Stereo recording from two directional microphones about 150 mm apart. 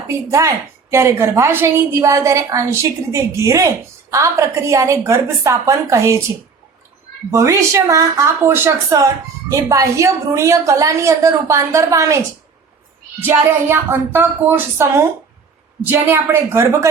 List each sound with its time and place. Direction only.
0.1 s a woman's voice: 20° right (ahead or behind)
7.3 s a woman's voice: 20° right (ahead or behind)
13.2 s speech: 15° right (ahead or behind)